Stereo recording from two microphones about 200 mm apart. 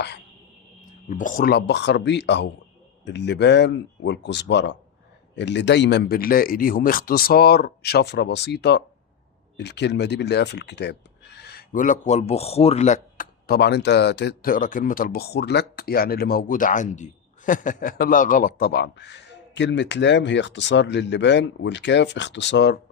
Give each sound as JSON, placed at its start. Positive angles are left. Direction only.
{"t": 1.1, "sound": "speech", "side_deg": 40}